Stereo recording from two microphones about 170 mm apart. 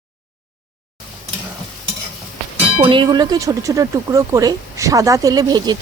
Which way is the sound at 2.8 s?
30° right (ahead or behind).